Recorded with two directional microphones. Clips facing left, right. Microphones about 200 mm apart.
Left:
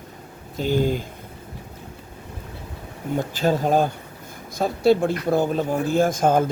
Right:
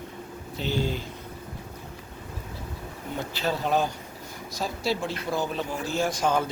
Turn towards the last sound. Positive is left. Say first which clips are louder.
# left 7 dB
turn(degrees=50)  # may be behind; listen again after turning